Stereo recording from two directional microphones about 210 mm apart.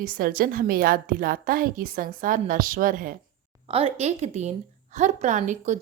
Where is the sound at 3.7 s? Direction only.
25° right (ahead or behind).